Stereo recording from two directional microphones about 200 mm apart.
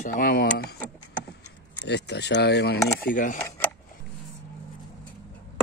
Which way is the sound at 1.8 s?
60° left (ahead or behind).